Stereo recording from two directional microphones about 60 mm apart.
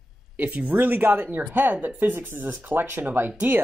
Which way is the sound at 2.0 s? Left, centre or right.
Right.